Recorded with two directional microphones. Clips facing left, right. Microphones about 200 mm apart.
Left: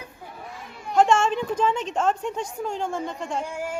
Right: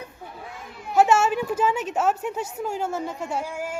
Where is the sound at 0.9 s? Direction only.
5° right (ahead or behind).